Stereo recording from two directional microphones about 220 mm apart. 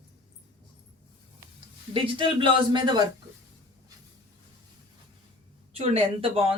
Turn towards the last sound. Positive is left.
turn(degrees=-25)  # may be behind; listen again after turning